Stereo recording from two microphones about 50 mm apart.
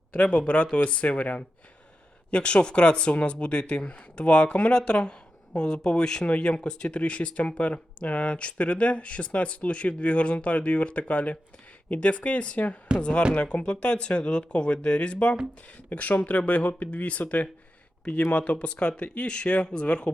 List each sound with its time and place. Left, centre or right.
0.1 s speech: left